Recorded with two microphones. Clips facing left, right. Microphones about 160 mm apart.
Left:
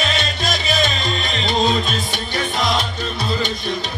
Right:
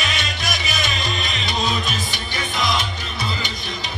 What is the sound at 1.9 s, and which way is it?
Music, 55° left (ahead or behind).